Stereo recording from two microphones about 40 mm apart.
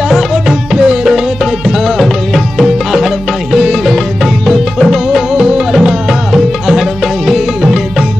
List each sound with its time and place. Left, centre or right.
0.1 s music: centre